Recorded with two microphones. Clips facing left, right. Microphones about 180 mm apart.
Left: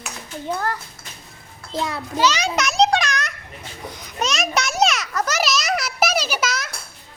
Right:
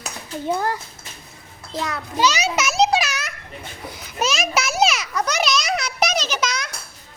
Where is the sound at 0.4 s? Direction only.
15° right (ahead or behind).